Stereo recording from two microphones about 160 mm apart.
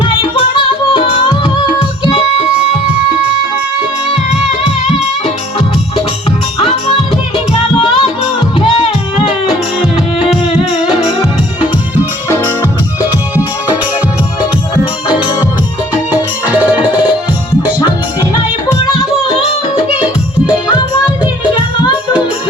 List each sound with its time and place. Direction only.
0.0 s music: 30° left (ahead or behind)
6.6 s music: 35° left (ahead or behind)
16.5 s music: 10° right (ahead or behind)